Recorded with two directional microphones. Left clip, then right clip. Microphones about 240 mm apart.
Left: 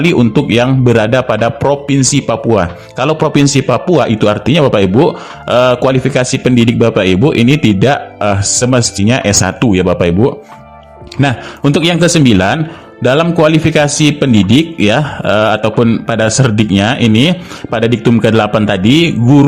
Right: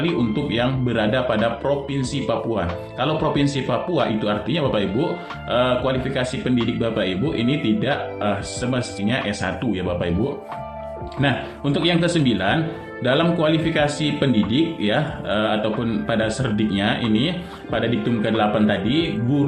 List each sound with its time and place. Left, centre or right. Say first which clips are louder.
0.5 s a man's voice: left 12 dB; left
11.2 s a man's voice: left 9 dB; left